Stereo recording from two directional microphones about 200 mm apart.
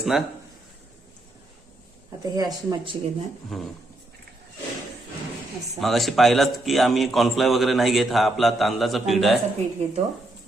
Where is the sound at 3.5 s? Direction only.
Centre (ahead or behind).